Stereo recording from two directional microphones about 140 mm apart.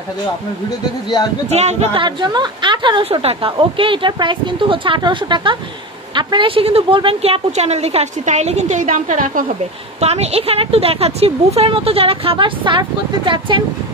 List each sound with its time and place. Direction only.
1.5 s a woman's voice: 50° right (ahead or behind)
2.0 s a woman's voice: 30° right (ahead or behind); by 9.5 s 70° right (ahead or behind)
9.9 s a woman's voice: 50° right (ahead or behind)